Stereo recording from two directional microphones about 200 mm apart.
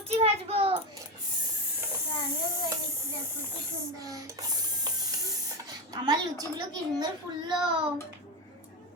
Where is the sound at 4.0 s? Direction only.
15° right (ahead or behind).